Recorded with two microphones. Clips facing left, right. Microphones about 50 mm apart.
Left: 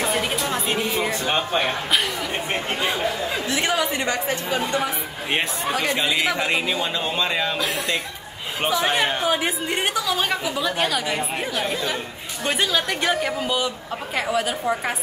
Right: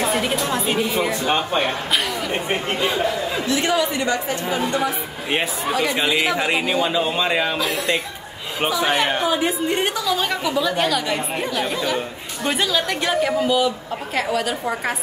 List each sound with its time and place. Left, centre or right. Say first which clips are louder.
0.0 s a sound: right 2 dB; centre
0.7 s a woman's voice: right 3 dB; centre
3.5 s speech: right 3 dB; centre
3.9 s a woman's voice: right 2 dB; left
5.3 s a woman's voice: right 2 dB; centre
5.9 s a man's voice: right 2 dB; centre
10.3 s a woman's voice: right 3 dB; centre